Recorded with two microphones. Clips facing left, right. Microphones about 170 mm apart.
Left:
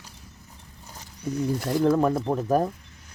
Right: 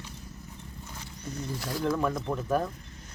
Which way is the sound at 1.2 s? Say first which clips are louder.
Left 10 dB; 10° left (ahead or behind).